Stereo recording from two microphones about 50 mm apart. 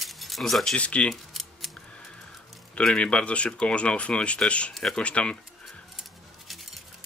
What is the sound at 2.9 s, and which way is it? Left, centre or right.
Speech, left.